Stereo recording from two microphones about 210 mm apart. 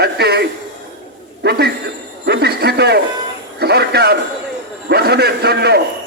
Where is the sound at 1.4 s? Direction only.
50° right (ahead or behind).